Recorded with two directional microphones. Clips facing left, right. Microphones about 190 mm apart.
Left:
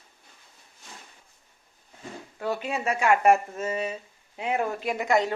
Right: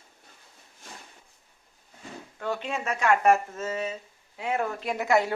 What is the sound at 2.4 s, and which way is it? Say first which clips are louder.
Speech: left 2 dB; 10° left (ahead or behind).